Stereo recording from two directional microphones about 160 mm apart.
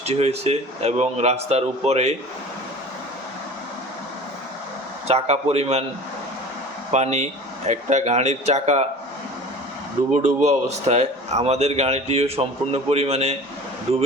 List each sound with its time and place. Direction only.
0.0 s speech: 40° right (ahead or behind)
5.0 s speech: 40° right (ahead or behind)
6.9 s a man's voice: 45° right (ahead or behind)
10.2 s a man's voice: 45° right (ahead or behind)